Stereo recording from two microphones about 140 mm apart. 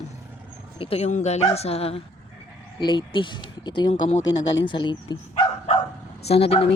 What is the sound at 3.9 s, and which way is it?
Speech, 50° left (ahead or behind).